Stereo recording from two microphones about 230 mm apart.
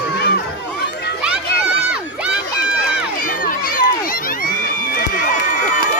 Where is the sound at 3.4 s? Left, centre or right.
Left.